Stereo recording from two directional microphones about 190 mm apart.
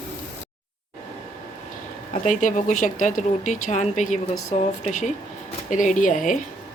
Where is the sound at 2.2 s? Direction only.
40° left (ahead or behind).